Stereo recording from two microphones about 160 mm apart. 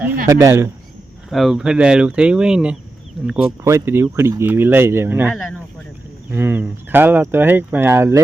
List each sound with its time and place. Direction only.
0.3 s speech: 20° right (ahead or behind)
1.3 s speech: centre (ahead or behind)
3.6 s speech: 20° right (ahead or behind)
5.3 s speech: 10° left (ahead or behind)
6.3 s speech: 15° right (ahead or behind)